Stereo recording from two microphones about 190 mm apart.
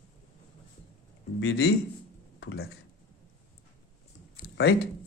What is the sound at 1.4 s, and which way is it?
Speech, 70° left (ahead or behind).